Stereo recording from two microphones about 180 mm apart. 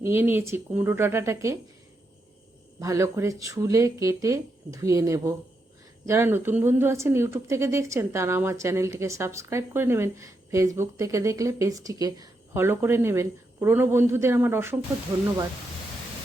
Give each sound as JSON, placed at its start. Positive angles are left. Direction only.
{"t": 0.0, "sound": "speech", "side_deg": -15}
{"t": 2.8, "sound": "speech", "side_deg": -15}